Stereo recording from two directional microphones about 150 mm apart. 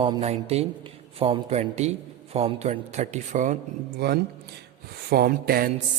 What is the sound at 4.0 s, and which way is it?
A man's voice, 90° right.